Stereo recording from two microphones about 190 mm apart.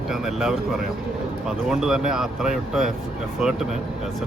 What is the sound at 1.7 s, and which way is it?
Speech, 5° right (ahead or behind).